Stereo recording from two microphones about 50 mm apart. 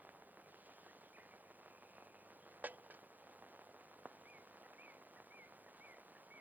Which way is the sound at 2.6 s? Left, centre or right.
Right.